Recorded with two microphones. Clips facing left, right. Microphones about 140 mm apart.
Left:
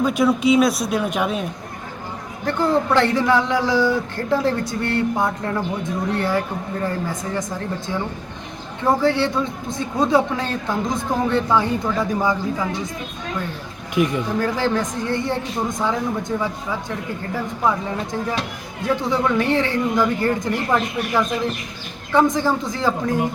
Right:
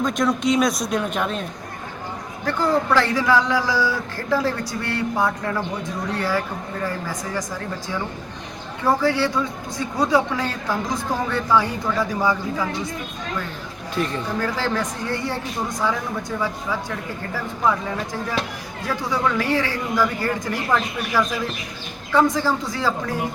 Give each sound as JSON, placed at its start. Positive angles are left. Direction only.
{"t": 0.0, "sound": "a man's voice", "side_deg": 5}
{"t": 2.5, "sound": "speech", "side_deg": 20}
{"t": 8.8, "sound": "speech", "side_deg": 20}
{"t": 13.9, "sound": "speech", "side_deg": 15}
{"t": 17.3, "sound": "speech", "side_deg": 20}